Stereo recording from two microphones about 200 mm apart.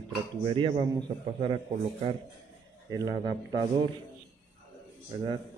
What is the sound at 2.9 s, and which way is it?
A man's voice, 20° right (ahead or behind).